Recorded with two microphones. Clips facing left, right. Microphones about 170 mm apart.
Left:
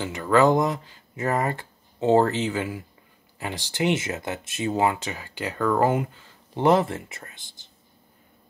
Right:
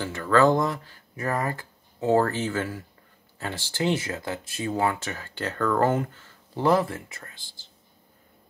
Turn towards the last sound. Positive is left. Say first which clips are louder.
# left 1 dB
turn(degrees=20)  # may be behind; listen again after turning